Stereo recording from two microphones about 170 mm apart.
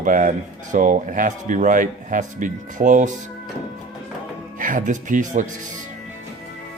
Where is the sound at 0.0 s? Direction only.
50° right (ahead or behind).